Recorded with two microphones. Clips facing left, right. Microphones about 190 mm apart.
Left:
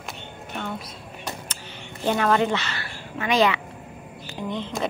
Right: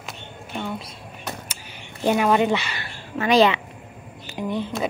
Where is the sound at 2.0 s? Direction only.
15° right (ahead or behind).